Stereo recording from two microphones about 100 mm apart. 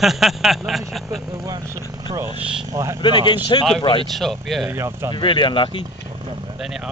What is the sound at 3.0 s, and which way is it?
Speech, 55° left (ahead or behind).